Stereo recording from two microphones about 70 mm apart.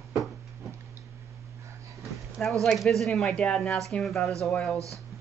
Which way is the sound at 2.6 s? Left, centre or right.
Centre.